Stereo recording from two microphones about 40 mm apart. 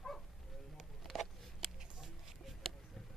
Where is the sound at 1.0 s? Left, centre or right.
Centre.